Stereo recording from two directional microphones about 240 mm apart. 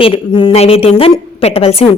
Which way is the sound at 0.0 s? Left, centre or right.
Left.